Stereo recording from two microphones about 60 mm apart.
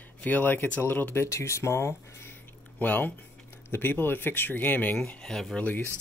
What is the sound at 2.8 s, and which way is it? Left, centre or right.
Speech, left.